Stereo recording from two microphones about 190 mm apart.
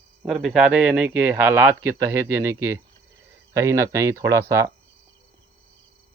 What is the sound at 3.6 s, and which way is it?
Speech, 15° right (ahead or behind).